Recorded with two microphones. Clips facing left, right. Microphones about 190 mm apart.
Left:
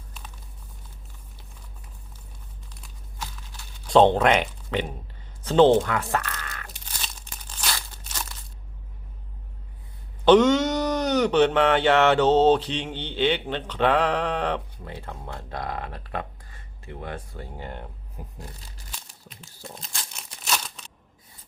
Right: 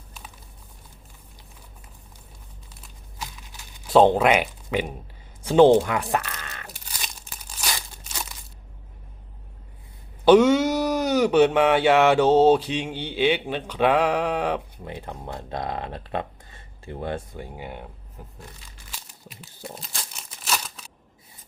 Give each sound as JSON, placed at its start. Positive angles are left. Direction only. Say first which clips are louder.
{"t": 3.2, "sound": "a sound", "louder": "even", "side_deg": -15}
{"t": 5.4, "sound": "speech", "louder": "right 2 dB", "side_deg": -10}
{"t": 6.7, "sound": "crumpling", "louder": "right 1 dB", "side_deg": -10}
{"t": 10.2, "sound": "speech", "louder": "right 1 dB", "side_deg": -10}
{"t": 17.3, "sound": "speech", "louder": "right 1 dB", "side_deg": -10}
{"t": 18.2, "sound": "a sound", "louder": "left 2 dB", "side_deg": 10}
{"t": 19.4, "sound": "crumpling", "louder": "right 3 dB", "side_deg": -5}